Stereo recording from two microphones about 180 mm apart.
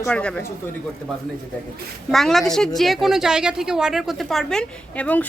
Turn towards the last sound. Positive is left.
turn(degrees=10)  # may be behind; listen again after turning